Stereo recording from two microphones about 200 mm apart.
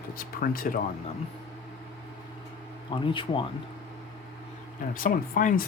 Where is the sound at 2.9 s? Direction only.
25° left (ahead or behind).